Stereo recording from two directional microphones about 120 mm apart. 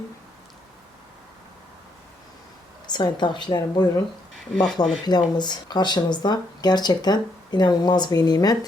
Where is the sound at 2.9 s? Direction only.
40° left (ahead or behind).